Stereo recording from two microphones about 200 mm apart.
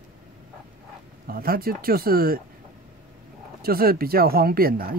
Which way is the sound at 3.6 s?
50° right (ahead or behind).